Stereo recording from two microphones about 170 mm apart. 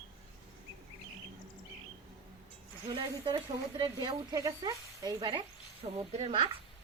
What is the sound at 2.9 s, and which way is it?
Speech, 30° right (ahead or behind).